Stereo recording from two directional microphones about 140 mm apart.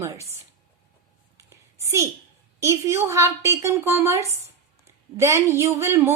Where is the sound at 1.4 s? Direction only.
20° right (ahead or behind).